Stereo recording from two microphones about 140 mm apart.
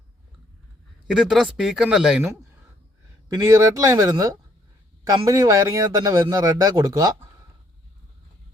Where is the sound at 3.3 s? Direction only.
25° right (ahead or behind).